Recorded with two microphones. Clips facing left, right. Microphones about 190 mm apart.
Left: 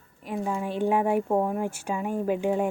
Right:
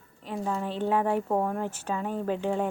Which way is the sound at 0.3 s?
10° left (ahead or behind).